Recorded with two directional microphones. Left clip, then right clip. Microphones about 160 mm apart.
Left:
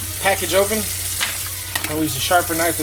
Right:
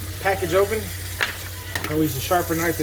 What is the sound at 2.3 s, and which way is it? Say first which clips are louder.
Speech: left 5 dB; 75° left (ahead or behind).